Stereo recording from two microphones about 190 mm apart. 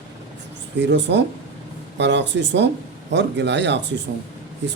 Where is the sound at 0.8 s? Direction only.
65° right (ahead or behind).